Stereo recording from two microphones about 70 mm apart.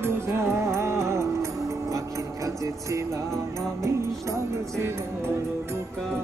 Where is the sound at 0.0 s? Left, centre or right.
Right.